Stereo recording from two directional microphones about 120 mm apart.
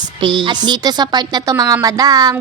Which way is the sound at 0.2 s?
40° right (ahead or behind).